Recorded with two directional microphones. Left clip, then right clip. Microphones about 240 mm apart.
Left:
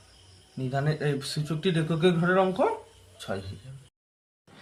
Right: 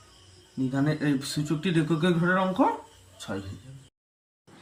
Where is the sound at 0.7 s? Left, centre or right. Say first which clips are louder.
Right 1 dB; left.